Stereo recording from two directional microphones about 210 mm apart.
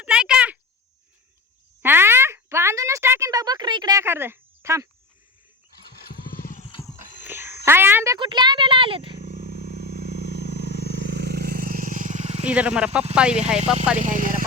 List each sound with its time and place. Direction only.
0.0 s a sound: 5° right (ahead or behind)
1.8 s a sound: 10° right (ahead or behind)
5.9 s vehicle: 45° left (ahead or behind)
7.3 s frog: 10° right (ahead or behind)
7.6 s speech: 10° right (ahead or behind)
9.1 s vehicle: 45° right (ahead or behind)
12.5 s speech: 5° right (ahead or behind)
14.0 s speech: 40° right (ahead or behind)